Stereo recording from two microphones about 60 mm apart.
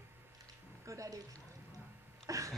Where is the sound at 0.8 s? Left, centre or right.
Right.